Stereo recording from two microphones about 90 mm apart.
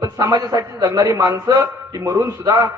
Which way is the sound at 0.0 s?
45° right (ahead or behind).